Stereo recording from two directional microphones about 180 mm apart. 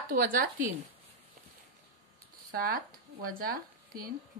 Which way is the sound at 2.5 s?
55° right (ahead or behind).